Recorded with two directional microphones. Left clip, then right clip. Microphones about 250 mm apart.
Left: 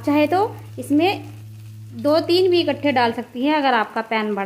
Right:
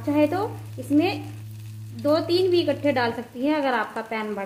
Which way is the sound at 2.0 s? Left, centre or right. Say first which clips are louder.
Left 4 dB; left.